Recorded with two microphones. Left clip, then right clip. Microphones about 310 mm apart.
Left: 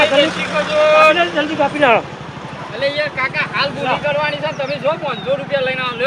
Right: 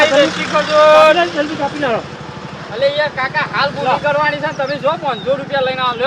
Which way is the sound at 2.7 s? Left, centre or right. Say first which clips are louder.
Right 3 dB; centre.